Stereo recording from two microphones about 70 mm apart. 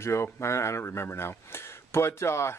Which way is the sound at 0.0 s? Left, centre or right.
Left.